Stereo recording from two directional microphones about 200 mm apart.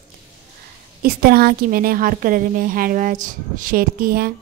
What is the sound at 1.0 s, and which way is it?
A woman's voice, 50° right (ahead or behind).